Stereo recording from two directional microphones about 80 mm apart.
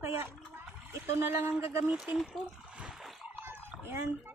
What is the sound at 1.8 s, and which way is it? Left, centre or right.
Speech, centre.